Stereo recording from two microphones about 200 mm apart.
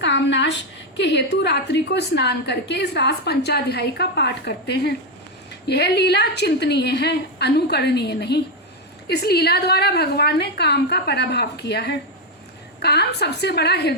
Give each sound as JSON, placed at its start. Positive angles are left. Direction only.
{"t": 0.0, "sound": "a woman's voice", "side_deg": 60}